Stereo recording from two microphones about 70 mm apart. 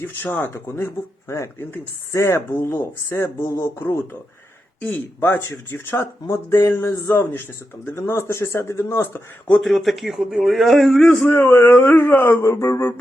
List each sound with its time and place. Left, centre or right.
0.0 s speech: left
5.2 s speech: left
9.6 s a man's voice: centre
11.1 s speech: centre
11.3 s a sound: left
12.4 s speech: left